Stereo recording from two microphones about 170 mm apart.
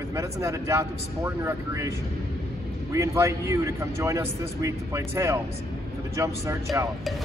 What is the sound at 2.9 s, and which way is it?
A man's voice, 15° right (ahead or behind).